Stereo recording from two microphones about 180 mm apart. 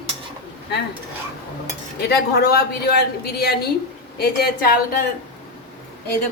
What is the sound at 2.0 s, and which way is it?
A woman's voice, 60° left (ahead or behind).